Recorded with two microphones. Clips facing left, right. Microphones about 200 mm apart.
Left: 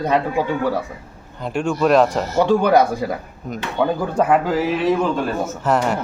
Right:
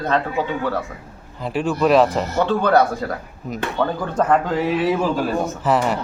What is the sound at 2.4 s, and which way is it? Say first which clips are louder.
A man's voice: left 2 dB; 15° left (ahead or behind).